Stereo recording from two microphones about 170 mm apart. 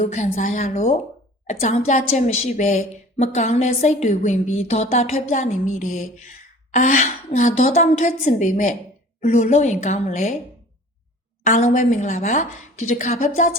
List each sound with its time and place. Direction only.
0.0 s a woman's voice: 45° left (ahead or behind)
11.4 s a woman's voice: 50° left (ahead or behind)